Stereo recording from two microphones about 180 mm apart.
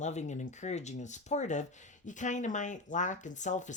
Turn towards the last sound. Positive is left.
turn(degrees=40)  # may be behind; listen again after turning